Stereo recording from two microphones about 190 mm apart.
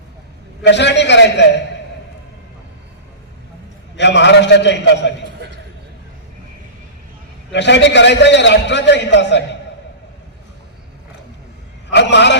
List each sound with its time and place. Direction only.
0.6 s a man's voice: 65° left (ahead or behind)
3.9 s a man's voice: 65° left (ahead or behind)
7.5 s a man's voice: 65° left (ahead or behind)
11.9 s a man's voice: 65° left (ahead or behind)